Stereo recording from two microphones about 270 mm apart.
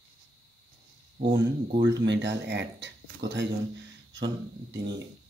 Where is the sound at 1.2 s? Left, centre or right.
Right.